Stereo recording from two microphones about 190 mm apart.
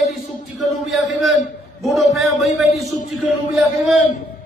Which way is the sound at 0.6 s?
Centre (ahead or behind).